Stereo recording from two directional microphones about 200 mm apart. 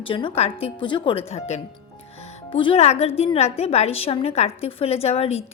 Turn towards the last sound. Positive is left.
turn(degrees=30)  # may be behind; listen again after turning